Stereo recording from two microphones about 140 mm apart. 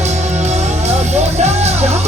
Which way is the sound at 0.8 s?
50° right (ahead or behind).